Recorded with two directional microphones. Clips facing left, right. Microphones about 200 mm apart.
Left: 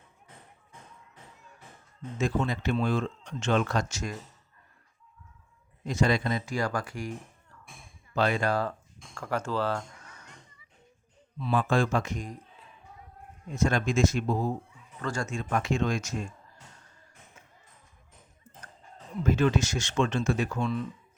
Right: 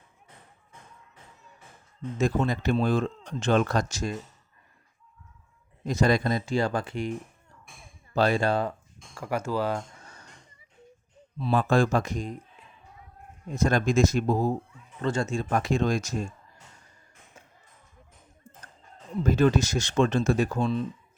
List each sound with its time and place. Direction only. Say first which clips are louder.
2.1 s speech: right 3 dB; 40° right (ahead or behind)
5.8 s speech: right 3 dB; 40° right (ahead or behind)
6.4 s speech: right 4 dB; 25° right (ahead or behind)
8.1 s speech: right 3 dB; 35° right (ahead or behind)
9.1 s speech: right 2 dB; 10° right (ahead or behind)
10.0 s music: right 2 dB; 30° right (ahead or behind)
11.3 s speech: right 3 dB; 35° right (ahead or behind)
13.5 s speech: right 3 dB; 35° right (ahead or behind)
15.0 s speech: right 5 dB; 25° right (ahead or behind)
19.2 s speech: right 3 dB; 35° right (ahead or behind)